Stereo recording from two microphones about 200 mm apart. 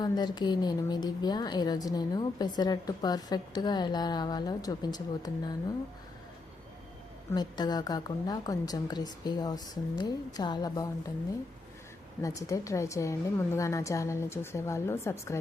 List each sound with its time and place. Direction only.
0.0 s a woman's voice: 20° left (ahead or behind)
7.3 s a woman's voice: 20° left (ahead or behind)
12.2 s a woman's voice: 15° left (ahead or behind)